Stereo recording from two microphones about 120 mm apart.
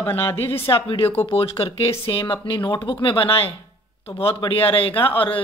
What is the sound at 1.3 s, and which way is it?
A man's voice, 55° left (ahead or behind).